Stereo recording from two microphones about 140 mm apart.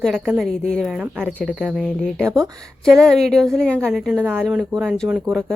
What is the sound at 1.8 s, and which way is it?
Speech, 5° left (ahead or behind).